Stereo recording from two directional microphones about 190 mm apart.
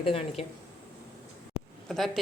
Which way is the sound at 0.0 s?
30° left (ahead or behind).